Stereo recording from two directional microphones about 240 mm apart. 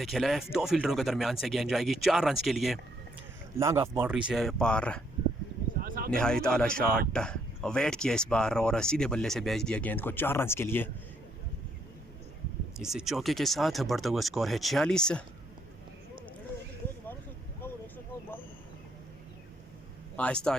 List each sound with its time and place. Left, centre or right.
0.0 s speech: centre
3.6 s speech: centre
5.8 s a sound: right
6.1 s speech: centre
6.8 s speech: right
7.1 s speech: centre
12.8 s speech: centre
17.6 s a sound: centre
20.1 s speech: centre